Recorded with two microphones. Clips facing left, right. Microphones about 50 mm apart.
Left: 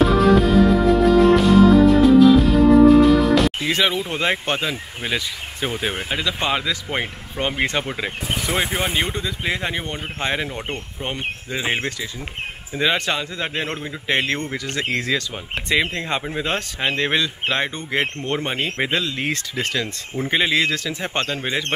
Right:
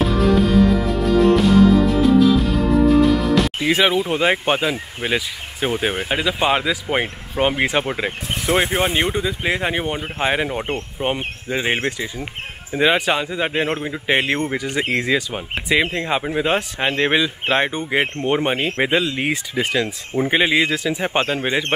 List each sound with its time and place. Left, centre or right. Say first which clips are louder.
0.0 s music: left 2 dB; centre
3.6 s speech: right 4 dB; centre
8.2 s speech: left 1 dB; centre
8.5 s speech: right 6 dB; centre
8.8 s speech: right 3 dB; right